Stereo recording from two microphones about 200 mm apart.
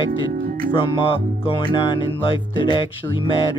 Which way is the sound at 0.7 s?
25° left (ahead or behind).